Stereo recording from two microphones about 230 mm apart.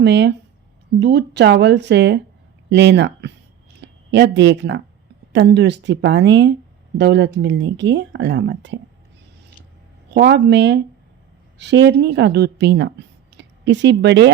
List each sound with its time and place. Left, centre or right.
0.0 s speech: right
10.2 s speech: right